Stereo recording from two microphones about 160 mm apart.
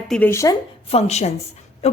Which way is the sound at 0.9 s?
45° left (ahead or behind).